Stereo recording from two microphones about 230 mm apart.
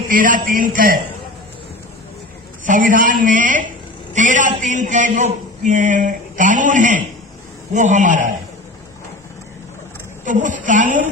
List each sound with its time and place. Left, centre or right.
0.1 s a man's voice: right
2.6 s a man's voice: right
10.2 s a man's voice: right